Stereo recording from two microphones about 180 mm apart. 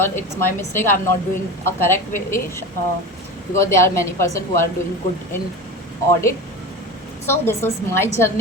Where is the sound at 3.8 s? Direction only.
15° left (ahead or behind).